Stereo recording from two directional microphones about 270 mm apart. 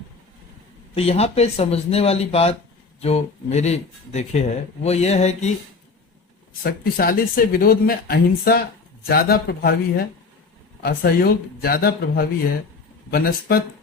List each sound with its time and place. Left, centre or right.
0.9 s speech: left
6.6 s speech: left